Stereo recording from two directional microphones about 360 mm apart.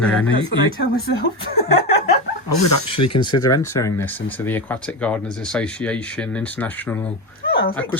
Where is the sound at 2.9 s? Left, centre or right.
Left.